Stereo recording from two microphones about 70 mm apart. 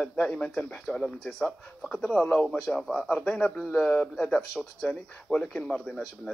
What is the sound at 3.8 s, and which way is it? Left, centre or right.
Speech, centre.